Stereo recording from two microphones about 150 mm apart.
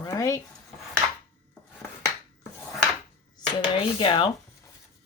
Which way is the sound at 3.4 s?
30° left (ahead or behind).